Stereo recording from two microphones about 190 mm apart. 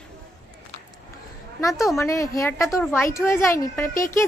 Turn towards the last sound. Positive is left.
turn(degrees=10)  # may be behind; listen again after turning